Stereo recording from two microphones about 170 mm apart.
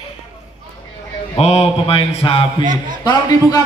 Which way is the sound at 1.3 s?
40° left (ahead or behind).